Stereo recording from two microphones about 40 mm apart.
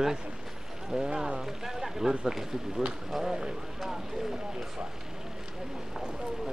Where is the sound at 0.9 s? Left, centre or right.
Centre.